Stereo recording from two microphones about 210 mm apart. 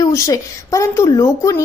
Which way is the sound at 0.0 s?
15° left (ahead or behind).